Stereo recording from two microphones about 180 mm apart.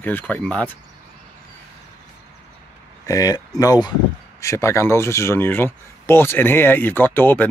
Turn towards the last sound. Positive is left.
turn(degrees=10)  # may be behind; listen again after turning